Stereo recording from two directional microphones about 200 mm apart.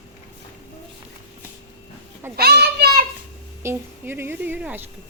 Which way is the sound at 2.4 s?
50° right (ahead or behind).